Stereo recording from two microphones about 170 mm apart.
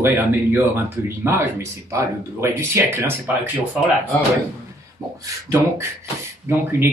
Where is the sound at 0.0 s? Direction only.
15° right (ahead or behind).